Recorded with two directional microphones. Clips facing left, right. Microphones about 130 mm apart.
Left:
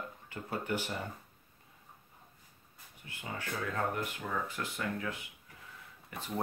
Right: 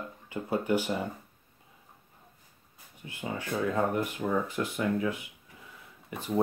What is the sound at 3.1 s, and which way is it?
Speech, 20° right (ahead or behind).